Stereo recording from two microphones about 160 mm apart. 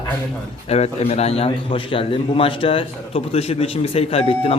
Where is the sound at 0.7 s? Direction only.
40° left (ahead or behind).